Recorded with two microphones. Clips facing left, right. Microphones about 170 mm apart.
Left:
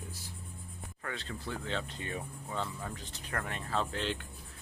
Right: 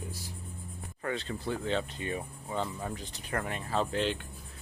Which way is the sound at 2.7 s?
30° right (ahead or behind).